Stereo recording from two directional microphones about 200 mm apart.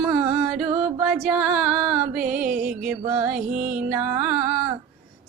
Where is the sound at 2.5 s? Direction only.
45° right (ahead or behind).